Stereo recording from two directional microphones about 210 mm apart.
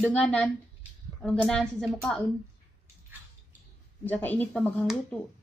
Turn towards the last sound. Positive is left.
turn(degrees=5)  # may be behind; listen again after turning